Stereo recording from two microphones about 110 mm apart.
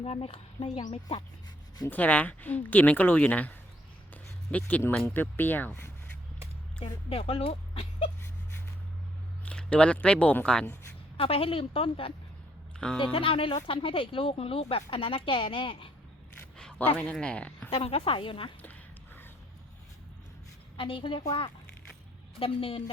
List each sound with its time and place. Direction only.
0.0 s speech: 65° left (ahead or behind)
1.9 s a woman's voice: 15° left (ahead or behind)
7.1 s speech: 60° left (ahead or behind)
9.4 s speech: 10° left (ahead or behind)
11.2 s speech: 60° left (ahead or behind)
12.8 s a woman's voice: 10° left (ahead or behind)
13.1 s speech: 55° left (ahead or behind)
16.6 s a sound: 5° left (ahead or behind)
17.0 s a woman's voice: 10° left (ahead or behind)
17.7 s speech: 60° left (ahead or behind)
18.6 s a sound: 20° left (ahead or behind)
20.7 s speech: 50° left (ahead or behind)
22.4 s speech: 55° left (ahead or behind)